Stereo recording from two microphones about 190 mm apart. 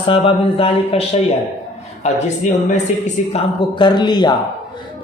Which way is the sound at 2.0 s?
40° left (ahead or behind).